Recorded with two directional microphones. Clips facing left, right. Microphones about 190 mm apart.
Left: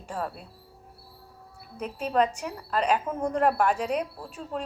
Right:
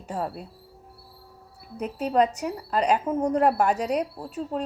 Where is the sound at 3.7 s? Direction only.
40° right (ahead or behind).